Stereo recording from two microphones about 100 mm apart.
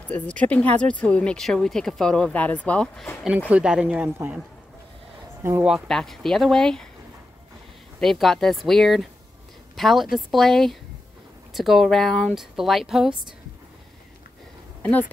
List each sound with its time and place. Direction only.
0.1 s speech: 15° left (ahead or behind)
3.3 s speech: 15° right (ahead or behind)
5.9 s speech: 5° left (ahead or behind)
8.0 s speech: 5° left (ahead or behind)
14.8 s speech: 15° left (ahead or behind)